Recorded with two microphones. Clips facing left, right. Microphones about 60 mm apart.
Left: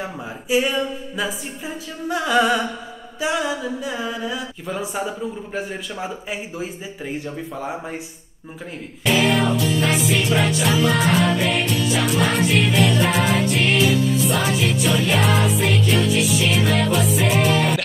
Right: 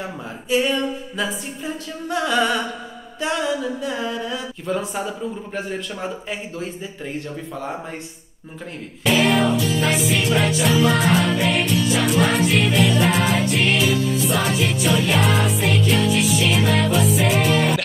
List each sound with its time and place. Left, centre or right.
0.0 s music: centre
9.0 s music: centre